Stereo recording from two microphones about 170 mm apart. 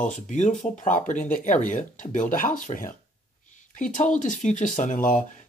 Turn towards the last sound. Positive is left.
turn(degrees=50)  # may be behind; listen again after turning